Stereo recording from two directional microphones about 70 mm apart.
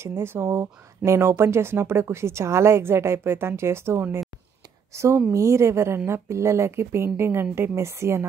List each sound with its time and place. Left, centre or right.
0.0 s speech: right